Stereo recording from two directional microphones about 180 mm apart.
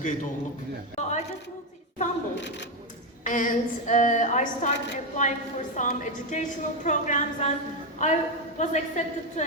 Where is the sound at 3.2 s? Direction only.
45° left (ahead or behind).